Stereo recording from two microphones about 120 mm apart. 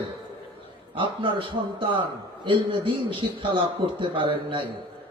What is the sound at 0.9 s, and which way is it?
A man's voice, 45° right (ahead or behind).